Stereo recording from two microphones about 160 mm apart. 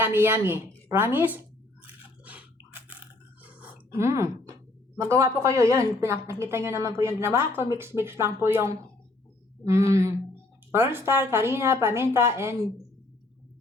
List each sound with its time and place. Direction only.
0.0 s a woman's voice: 15° right (ahead or behind)
1.8 s biting: 10° right (ahead or behind)
3.4 s a sound: 10° right (ahead or behind)
4.9 s a woman's voice: 15° right (ahead or behind)